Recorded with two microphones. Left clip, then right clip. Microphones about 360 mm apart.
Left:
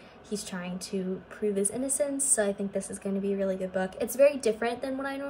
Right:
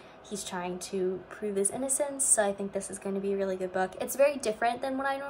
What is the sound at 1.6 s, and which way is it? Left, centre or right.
Speech, centre.